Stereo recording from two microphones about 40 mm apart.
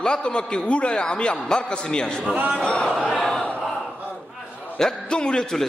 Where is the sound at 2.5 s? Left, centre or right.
Left.